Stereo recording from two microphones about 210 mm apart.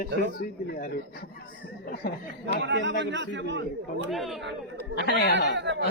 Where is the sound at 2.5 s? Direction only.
60° right (ahead or behind).